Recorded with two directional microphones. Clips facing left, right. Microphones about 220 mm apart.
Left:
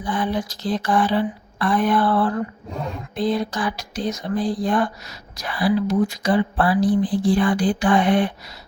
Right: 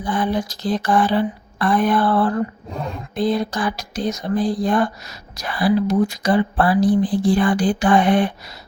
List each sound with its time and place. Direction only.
0.0 s speech: 45° right (ahead or behind)